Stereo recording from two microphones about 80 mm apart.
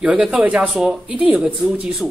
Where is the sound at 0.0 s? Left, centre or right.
Centre.